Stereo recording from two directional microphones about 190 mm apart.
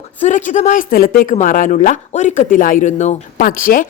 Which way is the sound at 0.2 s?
40° left (ahead or behind).